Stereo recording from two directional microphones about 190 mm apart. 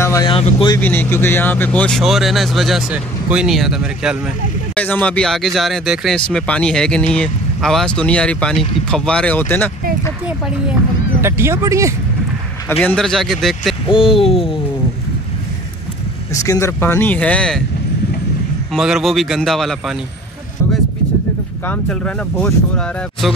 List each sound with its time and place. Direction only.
0.0 s vehicle: 15° left (ahead or behind)
0.3 s speech: 30° left (ahead or behind)
0.7 s speech: 10° left (ahead or behind)
4.7 s speech: 10° left (ahead or behind)
11.1 s speech: 15° right (ahead or behind)
12.8 s speech: centre (ahead or behind)
13.8 s speech: 25° left (ahead or behind)
16.3 s speech: 15° left (ahead or behind)
18.7 s speech: centre (ahead or behind)
21.6 s speech: 5° left (ahead or behind)